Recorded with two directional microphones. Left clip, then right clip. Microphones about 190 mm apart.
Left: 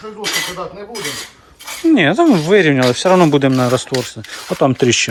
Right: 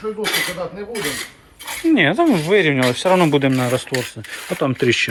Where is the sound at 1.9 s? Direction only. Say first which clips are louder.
Left 3 dB; 25° left (ahead or behind).